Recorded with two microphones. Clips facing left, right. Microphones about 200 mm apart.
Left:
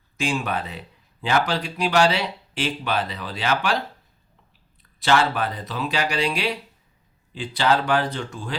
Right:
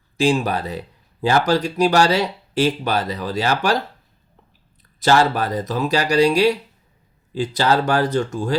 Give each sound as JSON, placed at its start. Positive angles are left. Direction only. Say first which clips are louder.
{"t": 0.2, "sound": "speech", "louder": "right 7 dB", "side_deg": -35}
{"t": 4.8, "sound": "speech", "louder": "right 4 dB", "side_deg": -40}